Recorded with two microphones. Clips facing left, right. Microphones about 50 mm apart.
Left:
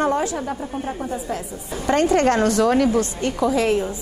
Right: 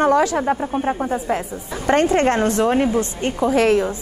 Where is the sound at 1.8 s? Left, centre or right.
Right.